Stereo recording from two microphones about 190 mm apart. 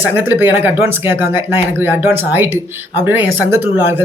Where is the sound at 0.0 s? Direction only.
10° right (ahead or behind).